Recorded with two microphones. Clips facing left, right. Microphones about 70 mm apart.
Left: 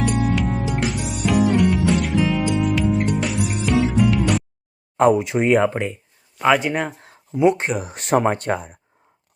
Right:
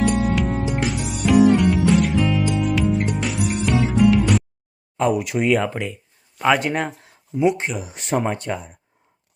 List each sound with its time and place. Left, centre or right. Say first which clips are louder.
0.0 s music: right 1 dB; centre
5.1 s speech: left 2 dB; left
6.4 s speech: left 1 dB; centre
7.4 s speech: left 3 dB; left